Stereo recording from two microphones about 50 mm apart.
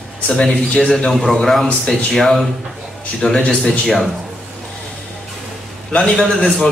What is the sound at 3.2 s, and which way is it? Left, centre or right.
Speech, centre.